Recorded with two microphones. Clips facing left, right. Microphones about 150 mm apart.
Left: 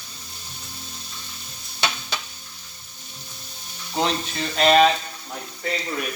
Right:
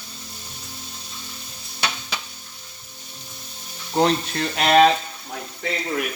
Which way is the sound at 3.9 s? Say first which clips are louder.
Right 5 dB; 55° right (ahead or behind).